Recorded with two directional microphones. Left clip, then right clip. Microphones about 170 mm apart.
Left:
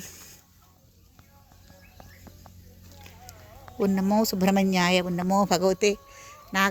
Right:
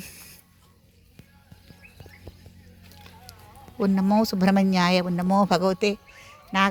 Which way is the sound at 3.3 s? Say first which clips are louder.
Right 1 dB; 40° left (ahead or behind).